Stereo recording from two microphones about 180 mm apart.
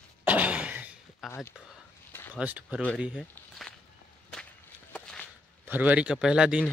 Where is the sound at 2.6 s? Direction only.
5° left (ahead or behind).